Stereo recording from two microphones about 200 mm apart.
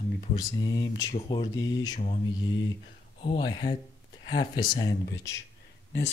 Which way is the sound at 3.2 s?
25° left (ahead or behind).